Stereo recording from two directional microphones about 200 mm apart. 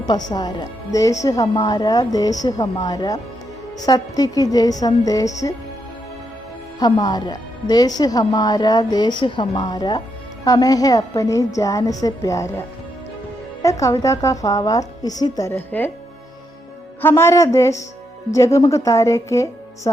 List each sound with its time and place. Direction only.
0.3 s a woman's voice: 20° left (ahead or behind)
6.7 s a woman's voice: 20° left (ahead or behind)
17.0 s speech: 10° left (ahead or behind)